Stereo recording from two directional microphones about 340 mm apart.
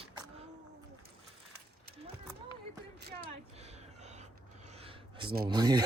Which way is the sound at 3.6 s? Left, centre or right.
Centre.